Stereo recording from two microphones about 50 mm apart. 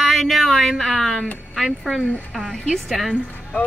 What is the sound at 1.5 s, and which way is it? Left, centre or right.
A woman's voice, centre.